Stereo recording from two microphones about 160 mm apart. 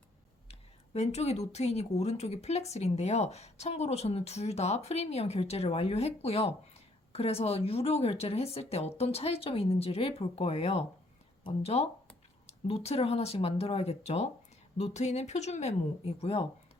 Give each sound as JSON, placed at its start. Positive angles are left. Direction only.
{"t": 0.9, "sound": "a woman's voice", "side_deg": 40}